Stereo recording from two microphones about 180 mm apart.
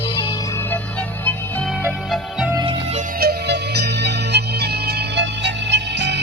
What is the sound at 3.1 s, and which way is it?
Music, 65° right (ahead or behind).